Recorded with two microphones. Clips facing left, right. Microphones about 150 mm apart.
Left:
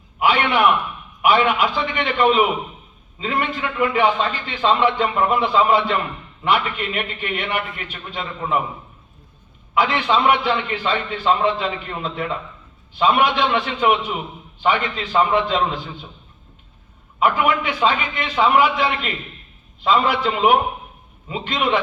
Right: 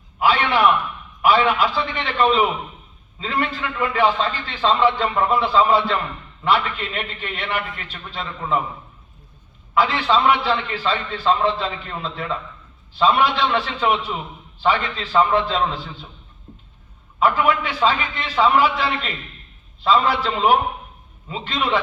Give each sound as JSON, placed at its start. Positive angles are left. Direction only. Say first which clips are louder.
{"t": 0.2, "sound": "a sound", "louder": "even", "side_deg": 15}
{"t": 1.2, "sound": "a man's voice", "louder": "even", "side_deg": 15}
{"t": 9.7, "sound": "a man's voice", "louder": "even", "side_deg": 15}
{"t": 17.2, "sound": "a man's voice", "louder": "even", "side_deg": 15}